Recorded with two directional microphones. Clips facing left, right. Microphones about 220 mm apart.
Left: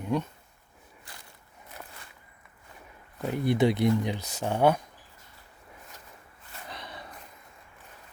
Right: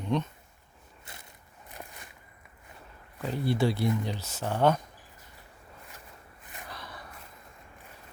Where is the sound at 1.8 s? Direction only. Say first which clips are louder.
Right 2 dB; 15° right (ahead or behind).